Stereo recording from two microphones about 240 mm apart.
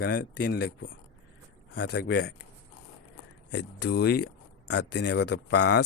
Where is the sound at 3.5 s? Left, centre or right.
Left.